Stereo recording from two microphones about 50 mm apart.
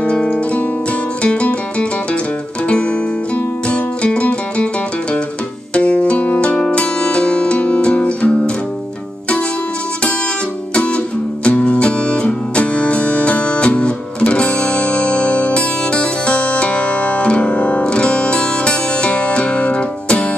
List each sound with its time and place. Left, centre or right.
0.0 s music: left
5.8 s music: left
10.7 s music: left